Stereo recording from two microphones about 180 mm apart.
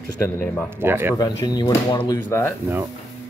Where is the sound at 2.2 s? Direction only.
10° left (ahead or behind).